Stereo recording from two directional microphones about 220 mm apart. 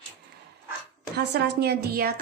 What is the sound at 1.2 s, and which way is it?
Speech, 50° right (ahead or behind).